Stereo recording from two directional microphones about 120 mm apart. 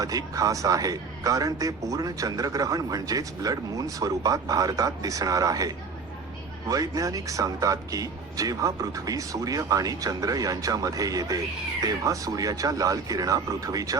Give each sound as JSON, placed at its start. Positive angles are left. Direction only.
{"t": 0.0, "sound": "a man's voice", "side_deg": -30}